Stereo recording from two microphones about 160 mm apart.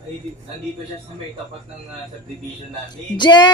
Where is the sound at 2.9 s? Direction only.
30° left (ahead or behind).